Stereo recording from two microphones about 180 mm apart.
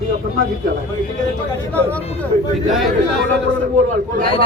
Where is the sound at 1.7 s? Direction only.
10° left (ahead or behind).